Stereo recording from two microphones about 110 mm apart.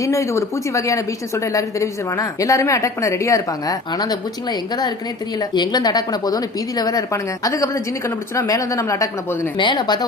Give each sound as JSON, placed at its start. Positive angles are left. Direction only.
{"t": 0.0, "sound": "a woman's voice", "side_deg": 30}
{"t": 9.6, "sound": "a woman's voice", "side_deg": 45}